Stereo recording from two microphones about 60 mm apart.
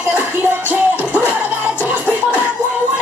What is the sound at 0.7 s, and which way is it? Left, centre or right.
Music, right.